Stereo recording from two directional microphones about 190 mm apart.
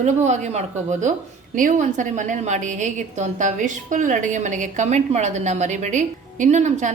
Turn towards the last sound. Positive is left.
turn(degrees=-40)  # may be behind; listen again after turning